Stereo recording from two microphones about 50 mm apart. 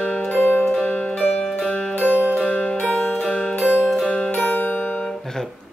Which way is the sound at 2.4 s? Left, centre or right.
Centre.